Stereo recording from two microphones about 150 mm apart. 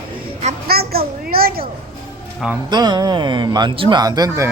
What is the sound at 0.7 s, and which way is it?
A child's voice, 90° right.